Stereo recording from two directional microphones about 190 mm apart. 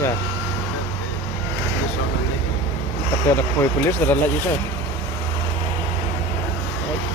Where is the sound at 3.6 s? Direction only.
10° left (ahead or behind).